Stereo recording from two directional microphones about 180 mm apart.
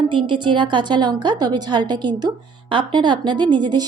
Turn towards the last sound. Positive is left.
turn(degrees=-25)  # may be behind; listen again after turning